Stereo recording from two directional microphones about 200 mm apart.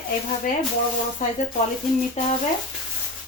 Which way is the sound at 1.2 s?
35° left (ahead or behind).